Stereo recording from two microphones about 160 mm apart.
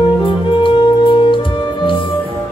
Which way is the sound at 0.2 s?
30° left (ahead or behind).